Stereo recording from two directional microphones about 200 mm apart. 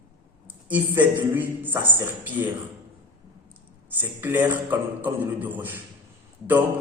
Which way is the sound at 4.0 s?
10° right (ahead or behind).